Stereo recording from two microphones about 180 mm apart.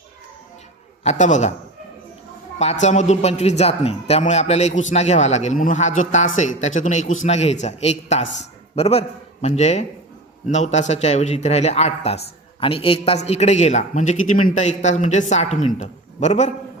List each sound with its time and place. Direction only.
1.0 s speech: 40° left (ahead or behind)
2.6 s a man's voice: 40° left (ahead or behind)